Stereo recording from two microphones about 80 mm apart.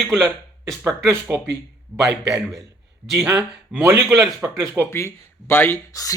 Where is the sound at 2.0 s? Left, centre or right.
Right.